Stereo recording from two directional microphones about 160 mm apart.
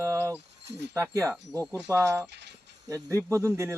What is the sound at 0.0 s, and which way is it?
Cricket, 20° right (ahead or behind).